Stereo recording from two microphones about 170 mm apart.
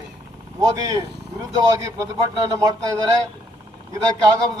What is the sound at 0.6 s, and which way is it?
Speech, 20° right (ahead or behind).